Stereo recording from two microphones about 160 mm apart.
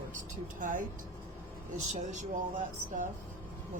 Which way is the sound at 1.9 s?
50° right (ahead or behind).